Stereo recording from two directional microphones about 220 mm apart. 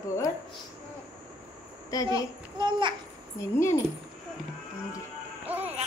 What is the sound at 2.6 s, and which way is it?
Speech, 20° right (ahead or behind).